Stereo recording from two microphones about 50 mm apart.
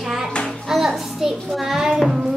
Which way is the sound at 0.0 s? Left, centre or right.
Centre.